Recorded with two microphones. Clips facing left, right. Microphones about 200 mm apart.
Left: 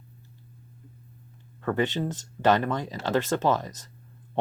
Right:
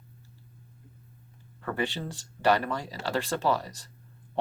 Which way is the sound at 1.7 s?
20° left (ahead or behind).